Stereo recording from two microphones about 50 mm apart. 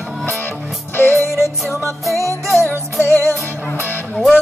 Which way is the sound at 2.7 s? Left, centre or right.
Left.